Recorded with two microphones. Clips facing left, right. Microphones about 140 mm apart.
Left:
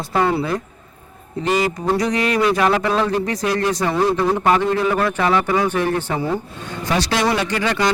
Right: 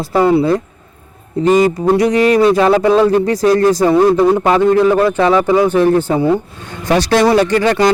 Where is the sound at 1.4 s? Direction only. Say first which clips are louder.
Right 9 dB; 40° right (ahead or behind).